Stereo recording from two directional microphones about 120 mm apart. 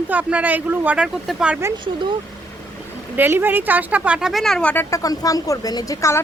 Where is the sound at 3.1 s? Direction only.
20° right (ahead or behind); by 4.8 s 10° left (ahead or behind).